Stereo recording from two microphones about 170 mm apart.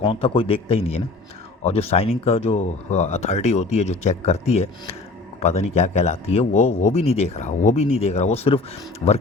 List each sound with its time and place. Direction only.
0.0 s a man's voice: 35° left (ahead or behind)